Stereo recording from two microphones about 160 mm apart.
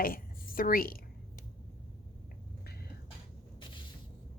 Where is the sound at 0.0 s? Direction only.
65° left (ahead or behind).